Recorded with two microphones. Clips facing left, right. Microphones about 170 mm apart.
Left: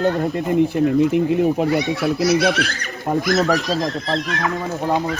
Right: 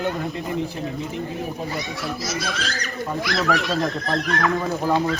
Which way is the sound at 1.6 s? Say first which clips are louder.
Left 10 dB; 65° left (ahead or behind).